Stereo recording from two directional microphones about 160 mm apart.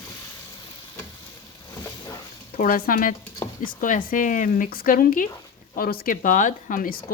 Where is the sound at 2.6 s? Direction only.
60° left (ahead or behind).